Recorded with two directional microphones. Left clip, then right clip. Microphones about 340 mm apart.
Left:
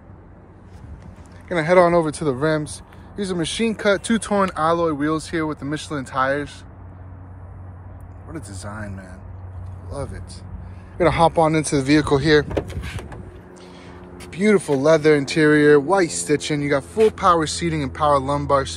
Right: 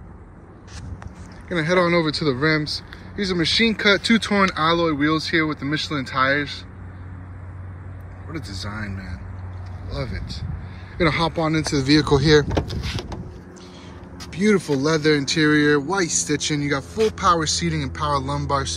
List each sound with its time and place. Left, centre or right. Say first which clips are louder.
1.5 s speech: left 4 dB; centre
8.3 s speech: right 2 dB; centre
11.0 s speech: left 5 dB; centre
14.3 s speech: left 2 dB; centre